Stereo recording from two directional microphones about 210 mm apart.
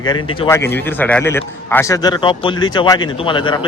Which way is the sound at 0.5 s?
10° left (ahead or behind).